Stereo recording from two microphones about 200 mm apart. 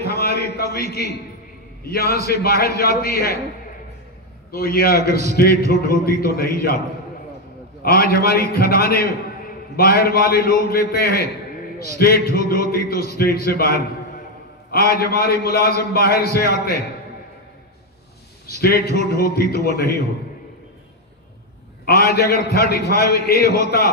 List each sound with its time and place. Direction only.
0.1 s a sound: 50° left (ahead or behind)
1.9 s a man's voice: 50° left (ahead or behind)
4.5 s a man's voice: 50° left (ahead or behind)
7.8 s a man's voice: 50° left (ahead or behind)
18.5 s a man's voice: 50° left (ahead or behind)
21.8 s a man's voice: 50° left (ahead or behind)